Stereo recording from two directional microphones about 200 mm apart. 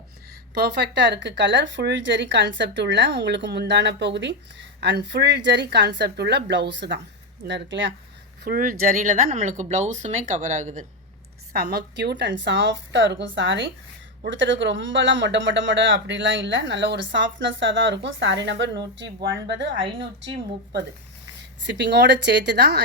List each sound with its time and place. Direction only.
0.5 s speech: 55° right (ahead or behind)
8.4 s speech: 45° right (ahead or behind)
11.5 s speech: 55° right (ahead or behind)
21.6 s speech: 60° right (ahead or behind)